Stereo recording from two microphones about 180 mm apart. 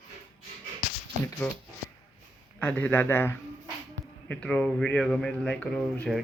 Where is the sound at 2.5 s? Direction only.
10° left (ahead or behind).